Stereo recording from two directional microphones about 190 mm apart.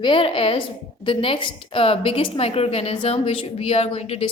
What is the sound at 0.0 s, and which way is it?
A woman's voice, 25° left (ahead or behind).